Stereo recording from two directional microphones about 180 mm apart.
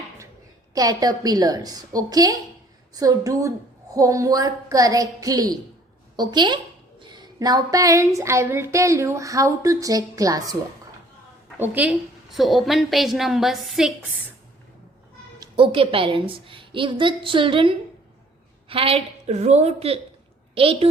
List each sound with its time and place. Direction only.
0.7 s a woman's voice: 20° right (ahead or behind)
7.0 s a sound: 25° right (ahead or behind)
11.6 s a woman's voice: 10° right (ahead or behind)
15.4 s a woman's voice: 30° right (ahead or behind)